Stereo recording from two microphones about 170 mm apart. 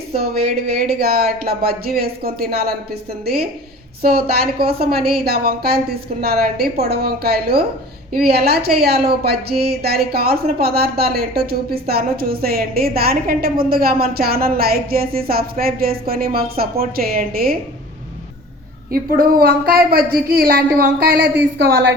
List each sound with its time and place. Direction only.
0.9 s a woman's voice: 65° right (ahead or behind)
18.9 s a woman's voice: 60° right (ahead or behind)